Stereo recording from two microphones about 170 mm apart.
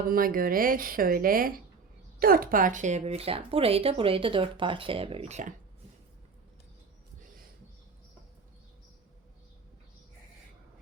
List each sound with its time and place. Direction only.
0.0 s a woman's voice: 55° right (ahead or behind)